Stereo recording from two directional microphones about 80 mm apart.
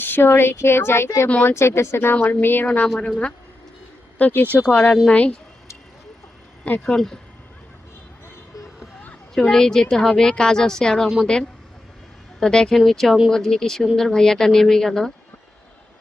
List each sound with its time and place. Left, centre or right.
0.0 s a woman's voice: left
3.0 s speech: centre
4.2 s speech: left
6.8 s speech: centre
9.3 s speech: centre
12.4 s speech: centre